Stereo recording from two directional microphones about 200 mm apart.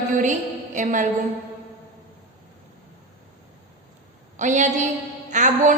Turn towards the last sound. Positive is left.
turn(degrees=-40)  # may be behind; listen again after turning